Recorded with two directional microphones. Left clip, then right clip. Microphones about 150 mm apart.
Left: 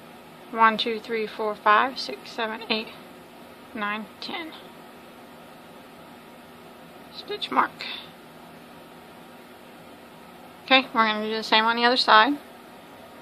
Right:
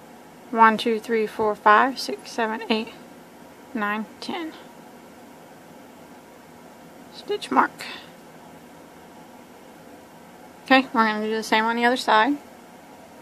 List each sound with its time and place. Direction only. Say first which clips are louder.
0.5 s speech: right 3 dB; 50° right (ahead or behind)
7.2 s speech: right 3 dB; 50° right (ahead or behind)
10.9 s a woman's voice: right 1 dB; 35° right (ahead or behind)